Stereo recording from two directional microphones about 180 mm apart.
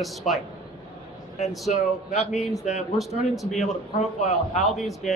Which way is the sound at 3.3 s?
Centre (ahead or behind).